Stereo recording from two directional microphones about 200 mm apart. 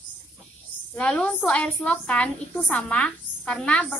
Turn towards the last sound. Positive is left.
turn(degrees=5)  # may be behind; listen again after turning